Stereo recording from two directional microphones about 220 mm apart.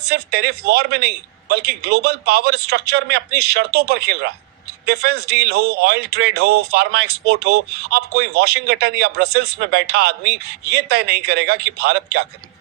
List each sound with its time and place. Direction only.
0.0 s speech: 45° right (ahead or behind)